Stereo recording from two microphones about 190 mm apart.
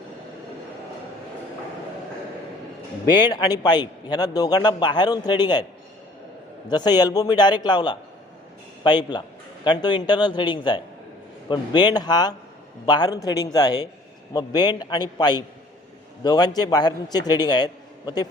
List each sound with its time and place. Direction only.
3.1 s a man's voice: 20° left (ahead or behind)
6.7 s a man's voice: 20° left (ahead or behind)